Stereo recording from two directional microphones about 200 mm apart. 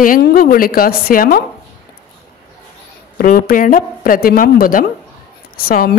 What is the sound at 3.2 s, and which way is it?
A woman's voice, 45° left (ahead or behind).